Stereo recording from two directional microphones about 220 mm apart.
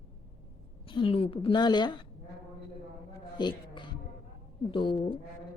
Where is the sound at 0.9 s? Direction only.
20° left (ahead or behind).